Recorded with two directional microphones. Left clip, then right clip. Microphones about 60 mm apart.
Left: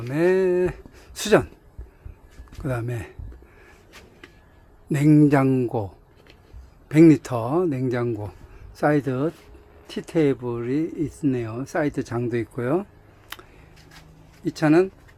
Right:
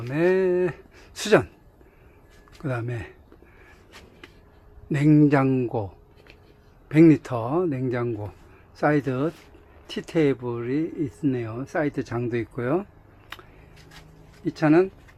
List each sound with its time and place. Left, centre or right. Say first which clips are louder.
0.1 s speech: left 1 dB; left
2.6 s speech: left 1 dB; left
4.9 s speech: left 1 dB; left
13.3 s a sound: left 2 dB; left
14.4 s speech: left 1 dB; left